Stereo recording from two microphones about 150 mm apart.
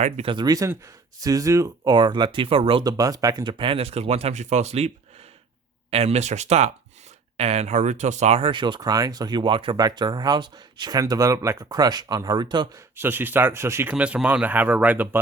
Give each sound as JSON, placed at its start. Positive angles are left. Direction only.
{"t": 0.0, "sound": "speech", "side_deg": -40}
{"t": 5.9, "sound": "speech", "side_deg": -45}
{"t": 13.0, "sound": "speech", "side_deg": -15}